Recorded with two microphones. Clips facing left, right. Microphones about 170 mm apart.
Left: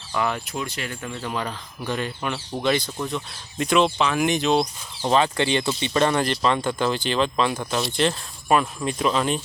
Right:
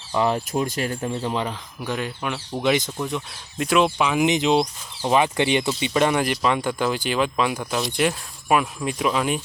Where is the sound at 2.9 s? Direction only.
5° right (ahead or behind).